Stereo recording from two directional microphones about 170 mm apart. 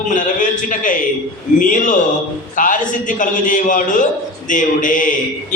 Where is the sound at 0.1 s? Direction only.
50° left (ahead or behind).